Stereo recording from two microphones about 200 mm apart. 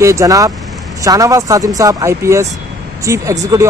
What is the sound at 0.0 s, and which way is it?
Speech, 15° right (ahead or behind).